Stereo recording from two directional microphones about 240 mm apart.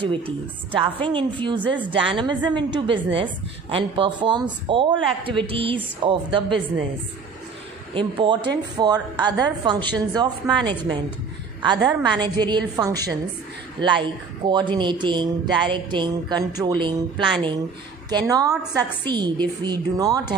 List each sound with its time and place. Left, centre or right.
0.7 s speech: right
7.9 s a woman's voice: right